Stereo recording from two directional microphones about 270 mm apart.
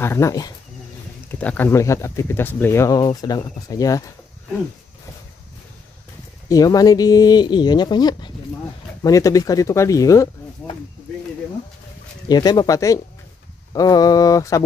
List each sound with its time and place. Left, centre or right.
0.0 s speech: centre
6.5 s speech: centre
12.3 s speech: centre